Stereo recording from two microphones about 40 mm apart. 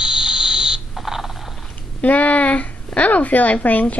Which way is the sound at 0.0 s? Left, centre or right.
Right.